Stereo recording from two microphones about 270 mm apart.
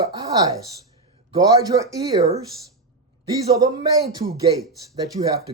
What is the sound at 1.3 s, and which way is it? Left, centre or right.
Speech, centre.